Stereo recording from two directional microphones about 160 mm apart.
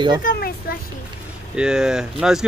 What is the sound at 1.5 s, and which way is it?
Speech, 5° right (ahead or behind).